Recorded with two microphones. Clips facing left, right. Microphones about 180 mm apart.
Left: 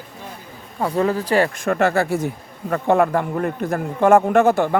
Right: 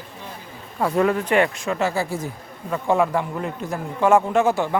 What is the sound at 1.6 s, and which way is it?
Speech, 55° left (ahead or behind).